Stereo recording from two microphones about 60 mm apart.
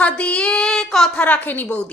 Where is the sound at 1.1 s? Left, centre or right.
Left.